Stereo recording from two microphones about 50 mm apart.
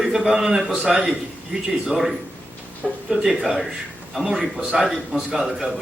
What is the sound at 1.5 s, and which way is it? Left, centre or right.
Speech, right.